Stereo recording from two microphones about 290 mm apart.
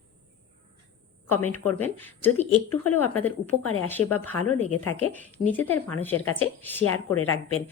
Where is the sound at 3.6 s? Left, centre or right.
Left.